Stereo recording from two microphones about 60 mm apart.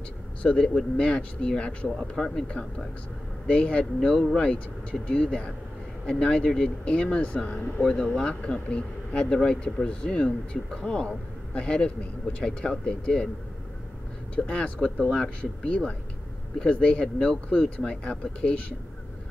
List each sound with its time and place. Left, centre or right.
0.4 s speech: centre
1.9 s speech: centre
2.2 s speech: centre
7.8 s speech: centre
14.3 s speech: left